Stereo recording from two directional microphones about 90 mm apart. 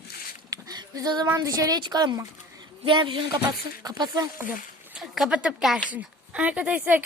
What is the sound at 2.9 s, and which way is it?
Speech, 65° right (ahead or behind).